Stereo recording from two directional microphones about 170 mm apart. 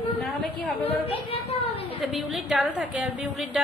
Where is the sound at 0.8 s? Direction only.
35° left (ahead or behind).